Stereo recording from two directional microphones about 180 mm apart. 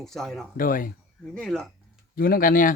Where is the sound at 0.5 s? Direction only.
50° left (ahead or behind).